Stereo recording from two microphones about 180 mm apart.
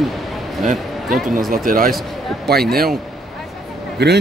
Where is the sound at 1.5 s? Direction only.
50° right (ahead or behind).